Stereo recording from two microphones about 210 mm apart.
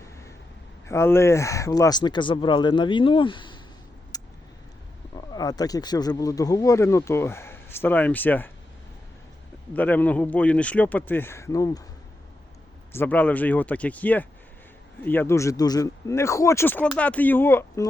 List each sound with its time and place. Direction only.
0.9 s speech: 10° left (ahead or behind)
4.1 s vehicle: 20° left (ahead or behind)
5.1 s speech: 20° left (ahead or behind)
9.7 s speech: 5° left (ahead or behind)
12.9 s speech: 10° left (ahead or behind)